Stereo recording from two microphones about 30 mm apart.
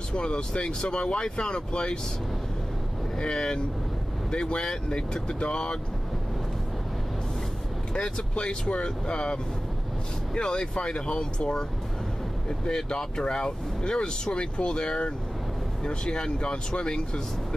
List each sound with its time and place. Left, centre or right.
0.1 s speech: left
3.2 s speech: left
4.5 s speech: left
7.9 s speech: left